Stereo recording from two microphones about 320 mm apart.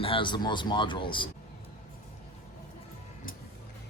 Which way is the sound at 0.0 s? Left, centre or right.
Centre.